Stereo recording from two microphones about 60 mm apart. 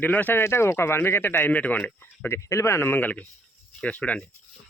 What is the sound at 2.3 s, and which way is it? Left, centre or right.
Speech, left.